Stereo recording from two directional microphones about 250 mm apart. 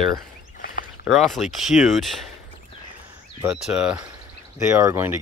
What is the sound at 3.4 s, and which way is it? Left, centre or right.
Speech, centre.